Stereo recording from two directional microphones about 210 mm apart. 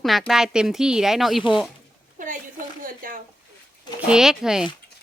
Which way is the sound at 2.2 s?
40° right (ahead or behind).